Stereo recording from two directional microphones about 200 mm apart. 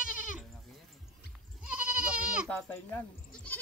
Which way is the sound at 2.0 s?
5° right (ahead or behind).